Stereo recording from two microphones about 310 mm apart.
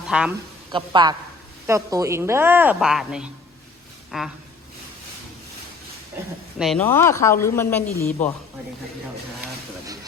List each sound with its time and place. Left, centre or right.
0.1 s speech: centre
0.7 s speech: centre
6.6 s speech: centre